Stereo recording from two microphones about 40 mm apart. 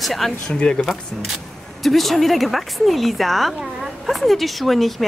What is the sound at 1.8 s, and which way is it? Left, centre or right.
Speech, centre.